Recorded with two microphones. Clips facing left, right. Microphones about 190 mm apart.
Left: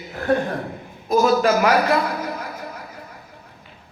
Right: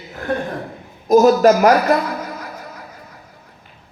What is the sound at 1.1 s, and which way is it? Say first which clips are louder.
Speech: right 6 dB; 40° right (ahead or behind).